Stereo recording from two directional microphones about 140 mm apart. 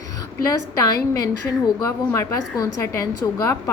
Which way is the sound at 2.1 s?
25° left (ahead or behind).